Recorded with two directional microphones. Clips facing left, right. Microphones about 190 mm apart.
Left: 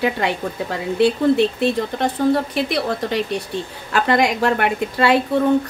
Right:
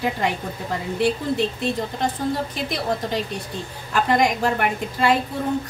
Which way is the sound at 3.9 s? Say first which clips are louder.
Left 2 dB; 75° left (ahead or behind).